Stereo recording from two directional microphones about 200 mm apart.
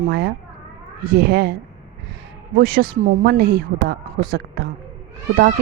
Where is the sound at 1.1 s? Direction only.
50° right (ahead or behind).